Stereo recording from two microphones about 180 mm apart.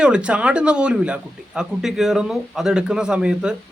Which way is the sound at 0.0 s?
5° right (ahead or behind).